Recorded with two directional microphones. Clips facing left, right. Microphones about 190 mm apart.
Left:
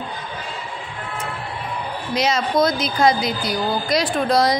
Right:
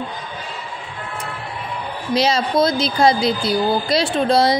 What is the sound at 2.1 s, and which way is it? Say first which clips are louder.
A woman's voice: right 2 dB; 30° right (ahead or behind).